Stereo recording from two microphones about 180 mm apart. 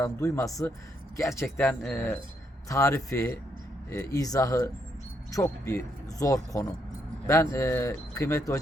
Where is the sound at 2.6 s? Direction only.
15° left (ahead or behind).